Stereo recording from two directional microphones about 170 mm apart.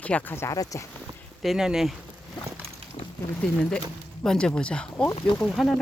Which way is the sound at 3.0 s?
40° left (ahead or behind).